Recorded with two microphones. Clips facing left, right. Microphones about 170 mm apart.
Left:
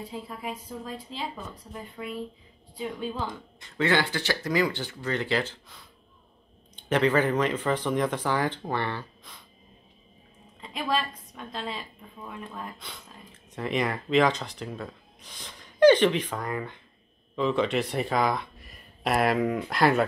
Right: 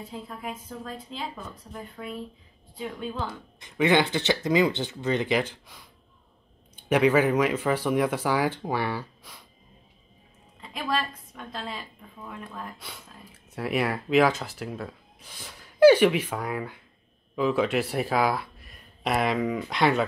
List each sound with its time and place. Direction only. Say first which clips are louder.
0.1 s a woman's voice: left 1 dB; 5° left (ahead or behind)
3.6 s speech: right 3 dB; 15° right (ahead or behind)
10.6 s a woman's voice: left 1 dB; centre (ahead or behind)
12.7 s speech: even; 5° right (ahead or behind)